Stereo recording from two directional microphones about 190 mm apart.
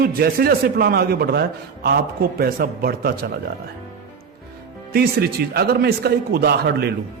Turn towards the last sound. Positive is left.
turn(degrees=-60)  # may be behind; listen again after turning